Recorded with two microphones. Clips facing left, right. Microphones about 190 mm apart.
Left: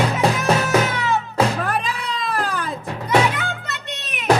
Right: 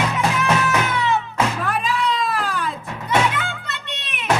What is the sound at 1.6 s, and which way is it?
Cat, 40° left (ahead or behind).